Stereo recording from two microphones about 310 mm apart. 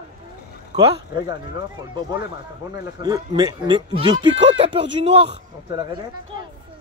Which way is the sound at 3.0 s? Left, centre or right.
Centre.